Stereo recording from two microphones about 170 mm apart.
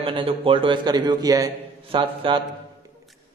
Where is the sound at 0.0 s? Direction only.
30° right (ahead or behind).